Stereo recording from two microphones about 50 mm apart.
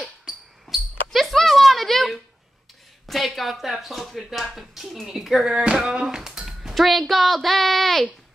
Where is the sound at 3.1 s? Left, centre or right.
Centre.